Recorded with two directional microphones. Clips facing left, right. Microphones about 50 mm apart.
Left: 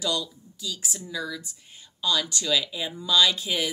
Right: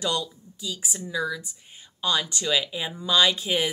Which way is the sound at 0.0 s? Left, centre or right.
Right.